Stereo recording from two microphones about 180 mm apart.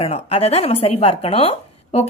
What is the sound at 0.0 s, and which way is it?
Speech, 35° left (ahead or behind).